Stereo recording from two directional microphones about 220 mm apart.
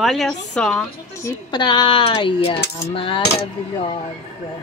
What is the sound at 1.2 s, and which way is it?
Speech, 20° left (ahead or behind).